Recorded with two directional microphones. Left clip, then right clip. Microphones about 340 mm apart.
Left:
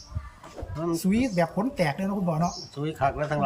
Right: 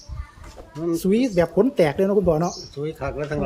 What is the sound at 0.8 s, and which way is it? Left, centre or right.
Speech, centre.